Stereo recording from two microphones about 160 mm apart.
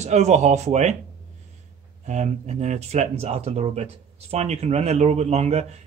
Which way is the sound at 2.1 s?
45° right (ahead or behind).